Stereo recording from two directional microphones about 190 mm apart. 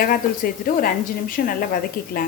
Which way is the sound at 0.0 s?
50° left (ahead or behind).